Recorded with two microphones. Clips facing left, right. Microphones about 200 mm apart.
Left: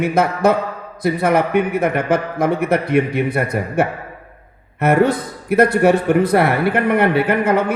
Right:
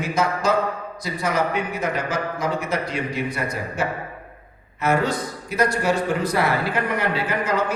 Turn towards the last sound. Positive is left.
turn(degrees=60)  # may be behind; listen again after turning